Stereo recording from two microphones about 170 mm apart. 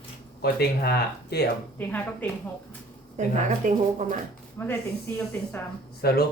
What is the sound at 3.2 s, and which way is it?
Speech, 45° right (ahead or behind).